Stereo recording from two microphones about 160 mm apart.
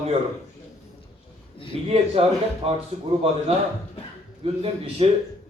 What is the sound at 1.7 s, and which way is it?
Speech, 40° right (ahead or behind).